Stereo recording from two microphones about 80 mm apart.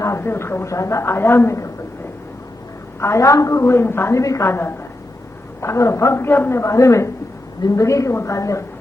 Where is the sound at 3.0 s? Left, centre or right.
Left.